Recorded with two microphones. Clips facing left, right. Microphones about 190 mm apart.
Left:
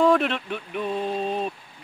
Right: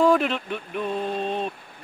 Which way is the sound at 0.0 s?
Centre (ahead or behind).